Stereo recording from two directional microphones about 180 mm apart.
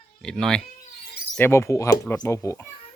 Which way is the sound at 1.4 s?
15° left (ahead or behind).